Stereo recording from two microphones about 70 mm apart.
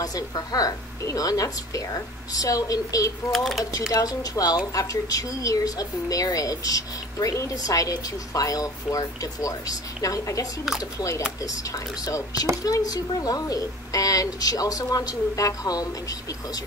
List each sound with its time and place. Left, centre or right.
0.0 s speech: left
3.3 s speech: centre
3.9 s speech: left